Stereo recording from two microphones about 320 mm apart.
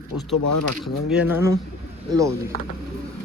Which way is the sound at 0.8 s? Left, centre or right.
Centre.